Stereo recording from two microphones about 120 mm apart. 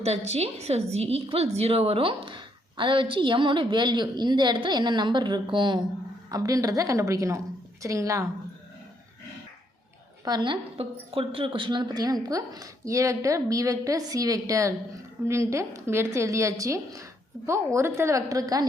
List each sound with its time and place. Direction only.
0.0 s a woman's voice: 60° right (ahead or behind); by 5.8 s 40° right (ahead or behind)
6.3 s a woman's voice: 30° right (ahead or behind)
10.2 s a woman's voice: 40° right (ahead or behind)